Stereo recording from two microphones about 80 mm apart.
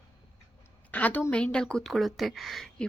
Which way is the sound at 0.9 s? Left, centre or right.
Centre.